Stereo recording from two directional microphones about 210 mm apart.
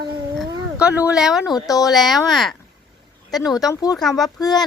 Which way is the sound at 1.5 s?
15° left (ahead or behind).